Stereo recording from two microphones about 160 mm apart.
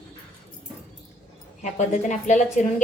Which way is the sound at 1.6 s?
50° left (ahead or behind).